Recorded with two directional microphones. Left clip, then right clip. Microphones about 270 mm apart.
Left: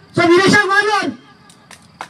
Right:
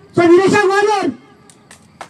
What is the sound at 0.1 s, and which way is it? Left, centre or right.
Speech, left.